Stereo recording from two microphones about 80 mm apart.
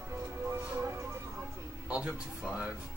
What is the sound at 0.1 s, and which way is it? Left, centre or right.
Music, right.